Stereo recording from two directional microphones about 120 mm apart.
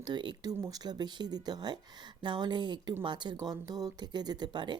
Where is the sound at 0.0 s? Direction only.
40° right (ahead or behind).